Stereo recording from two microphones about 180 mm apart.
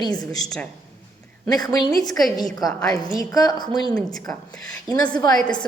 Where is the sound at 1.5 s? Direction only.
20° left (ahead or behind).